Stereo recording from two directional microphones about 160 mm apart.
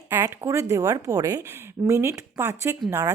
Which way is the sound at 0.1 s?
15° right (ahead or behind).